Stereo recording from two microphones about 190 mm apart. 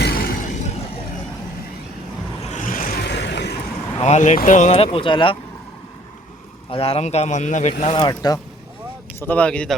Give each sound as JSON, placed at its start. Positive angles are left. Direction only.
{"t": 0.0, "sound": "a sound", "side_deg": 55}
{"t": 2.4, "sound": "vehicle", "side_deg": 40}
{"t": 4.0, "sound": "speech", "side_deg": 40}
{"t": 6.7, "sound": "speech", "side_deg": 30}
{"t": 9.2, "sound": "speech", "side_deg": 10}